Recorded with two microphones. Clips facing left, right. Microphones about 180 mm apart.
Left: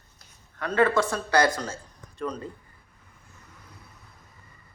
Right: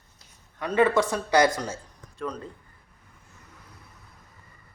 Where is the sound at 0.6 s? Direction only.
15° right (ahead or behind).